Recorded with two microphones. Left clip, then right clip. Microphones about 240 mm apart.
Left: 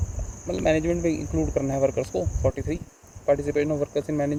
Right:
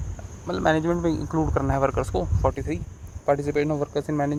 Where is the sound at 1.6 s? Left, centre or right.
Right.